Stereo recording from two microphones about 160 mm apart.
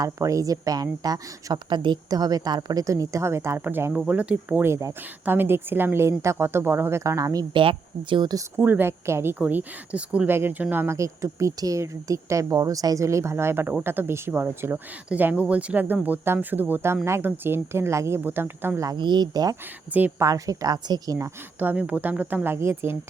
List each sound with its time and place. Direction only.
0.0 s speech: 20° right (ahead or behind)
7.6 s speech: 35° right (ahead or behind)
8.5 s speech: 10° right (ahead or behind)
19.9 s a woman's voice: 10° right (ahead or behind)
21.6 s speech: 10° right (ahead or behind)